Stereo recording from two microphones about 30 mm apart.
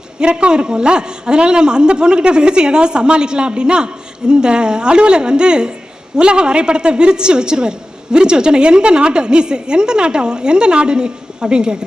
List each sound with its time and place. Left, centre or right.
0.2 s a man's voice: right